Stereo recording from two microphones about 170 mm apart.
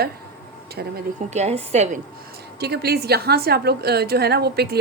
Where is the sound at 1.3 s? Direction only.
40° right (ahead or behind).